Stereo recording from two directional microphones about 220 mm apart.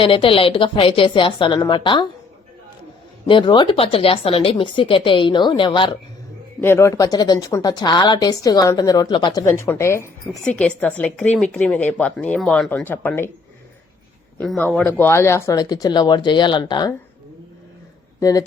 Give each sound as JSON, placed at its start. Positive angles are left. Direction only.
{"t": 0.0, "sound": "speech", "side_deg": 25}
{"t": 3.2, "sound": "speech", "side_deg": 20}
{"t": 6.6, "sound": "a woman's voice", "side_deg": 10}
{"t": 14.3, "sound": "a woman's voice", "side_deg": 5}
{"t": 18.2, "sound": "speech", "side_deg": 15}